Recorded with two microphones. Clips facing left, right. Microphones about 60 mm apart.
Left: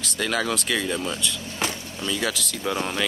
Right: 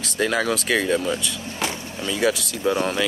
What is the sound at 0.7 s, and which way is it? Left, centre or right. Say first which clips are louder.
Speech: right 5 dB; right.